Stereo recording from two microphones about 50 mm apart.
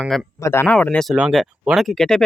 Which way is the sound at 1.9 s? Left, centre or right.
Centre.